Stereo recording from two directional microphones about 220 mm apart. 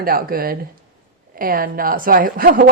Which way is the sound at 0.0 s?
40° right (ahead or behind).